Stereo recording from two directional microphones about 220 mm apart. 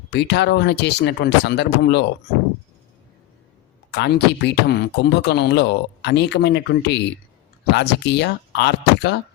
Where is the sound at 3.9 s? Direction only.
50° left (ahead or behind).